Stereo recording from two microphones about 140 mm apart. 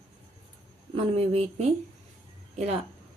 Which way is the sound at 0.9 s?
45° right (ahead or behind).